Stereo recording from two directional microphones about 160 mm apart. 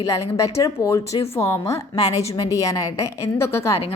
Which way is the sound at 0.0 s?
20° left (ahead or behind).